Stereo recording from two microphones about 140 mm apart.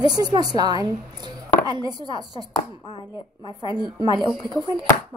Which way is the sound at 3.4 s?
35° left (ahead or behind).